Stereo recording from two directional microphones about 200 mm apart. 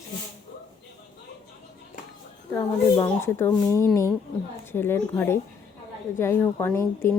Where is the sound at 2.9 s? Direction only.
15° left (ahead or behind).